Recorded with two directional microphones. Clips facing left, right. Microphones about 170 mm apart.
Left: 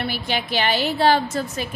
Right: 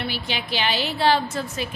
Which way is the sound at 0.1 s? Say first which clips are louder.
Left 4 dB; 50° left (ahead or behind).